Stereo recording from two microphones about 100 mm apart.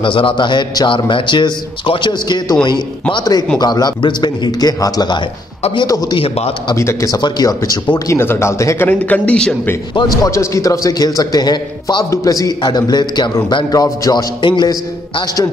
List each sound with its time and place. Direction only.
0.0 s a man's voice: 60° left (ahead or behind); by 6.1 s 40° left (ahead or behind)
6.1 s a man's voice: 75° left (ahead or behind)
6.7 s a man's voice: 30° left (ahead or behind)
7.2 s a man's voice: 45° left (ahead or behind)
8.1 s speech: 25° left (ahead or behind)
8.8 s speech: 15° left (ahead or behind)
9.9 s a man's voice: 35° left (ahead or behind)
12.1 s a man's voice: 35° left (ahead or behind)
13.7 s a man's voice: 35° left (ahead or behind)
14.4 s a man's voice: 55° left (ahead or behind)